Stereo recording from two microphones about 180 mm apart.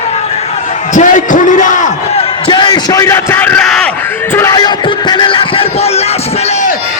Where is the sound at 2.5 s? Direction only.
25° left (ahead or behind); by 3.9 s 5° left (ahead or behind).